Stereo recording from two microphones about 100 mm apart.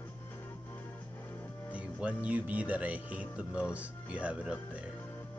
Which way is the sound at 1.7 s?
15° right (ahead or behind).